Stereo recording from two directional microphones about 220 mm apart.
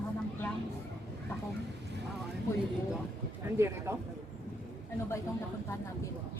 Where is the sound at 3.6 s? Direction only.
10° right (ahead or behind).